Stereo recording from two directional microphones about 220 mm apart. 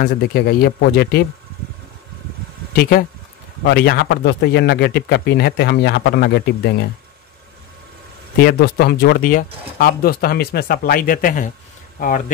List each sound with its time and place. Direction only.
0.0 s a man's voice: 45° left (ahead or behind)
2.7 s a man's voice: 45° left (ahead or behind)
8.4 s a man's voice: 45° left (ahead or behind)